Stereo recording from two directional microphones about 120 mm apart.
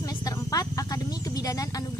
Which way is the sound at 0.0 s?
30° left (ahead or behind).